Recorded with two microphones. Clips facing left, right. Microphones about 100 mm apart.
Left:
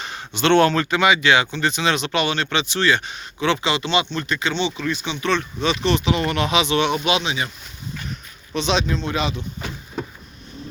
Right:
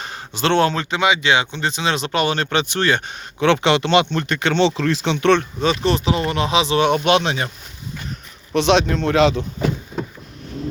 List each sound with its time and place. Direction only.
0.0 s speech: 35° right (ahead or behind); by 5.5 s 60° right (ahead or behind)
5.5 s speech: 40° right (ahead or behind)
8.5 s speech: 65° right (ahead or behind)